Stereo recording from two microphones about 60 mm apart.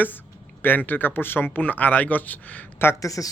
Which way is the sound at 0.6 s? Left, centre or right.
Left.